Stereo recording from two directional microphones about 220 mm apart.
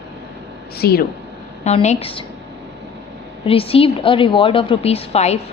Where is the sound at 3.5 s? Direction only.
25° left (ahead or behind).